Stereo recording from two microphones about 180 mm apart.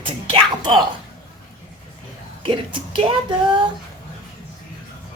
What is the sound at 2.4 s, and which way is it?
Speech, 30° right (ahead or behind).